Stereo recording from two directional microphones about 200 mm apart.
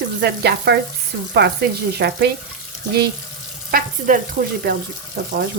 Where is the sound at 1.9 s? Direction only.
55° right (ahead or behind).